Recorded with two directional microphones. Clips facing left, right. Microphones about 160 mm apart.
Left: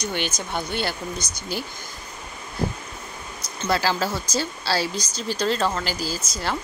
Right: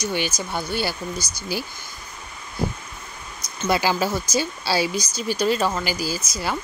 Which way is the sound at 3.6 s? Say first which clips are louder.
Right 2 dB; 15° right (ahead or behind).